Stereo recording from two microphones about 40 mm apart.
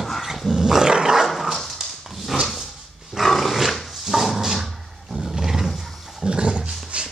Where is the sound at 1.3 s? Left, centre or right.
Centre.